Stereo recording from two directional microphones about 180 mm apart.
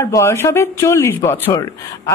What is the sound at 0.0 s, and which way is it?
Speech, 15° left (ahead or behind).